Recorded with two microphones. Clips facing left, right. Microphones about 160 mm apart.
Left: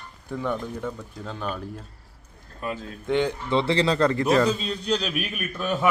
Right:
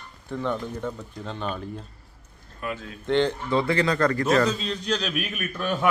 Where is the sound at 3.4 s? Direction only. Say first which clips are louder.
Left 1 dB; 25° left (ahead or behind).